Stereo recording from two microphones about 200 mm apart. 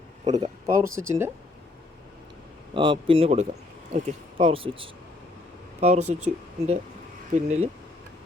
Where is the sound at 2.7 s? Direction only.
25° right (ahead or behind).